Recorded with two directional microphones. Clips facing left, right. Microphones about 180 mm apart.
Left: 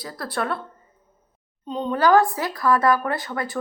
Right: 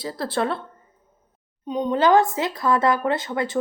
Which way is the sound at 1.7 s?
15° right (ahead or behind).